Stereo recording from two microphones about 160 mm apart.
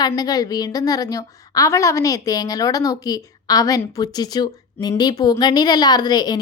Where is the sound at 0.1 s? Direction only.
25° left (ahead or behind).